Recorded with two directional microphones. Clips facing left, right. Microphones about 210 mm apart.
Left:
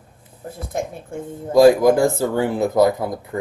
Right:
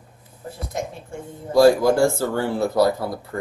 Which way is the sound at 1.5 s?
15° left (ahead or behind).